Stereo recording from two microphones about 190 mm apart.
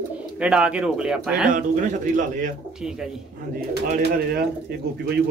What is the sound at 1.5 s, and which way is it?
Speech, 40° right (ahead or behind).